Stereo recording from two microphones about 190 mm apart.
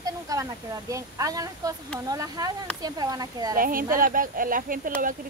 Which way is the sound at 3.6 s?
50° right (ahead or behind).